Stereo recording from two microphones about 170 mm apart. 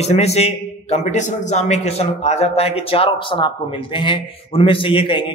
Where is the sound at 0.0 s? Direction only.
40° left (ahead or behind).